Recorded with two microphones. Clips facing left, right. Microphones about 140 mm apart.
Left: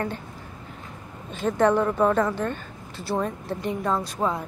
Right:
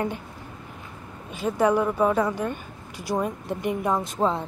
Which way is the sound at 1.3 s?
10° right (ahead or behind).